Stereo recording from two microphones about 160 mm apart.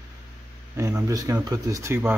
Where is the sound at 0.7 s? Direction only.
20° right (ahead or behind).